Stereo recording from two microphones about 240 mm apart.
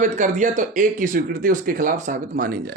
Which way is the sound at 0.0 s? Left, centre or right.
Right.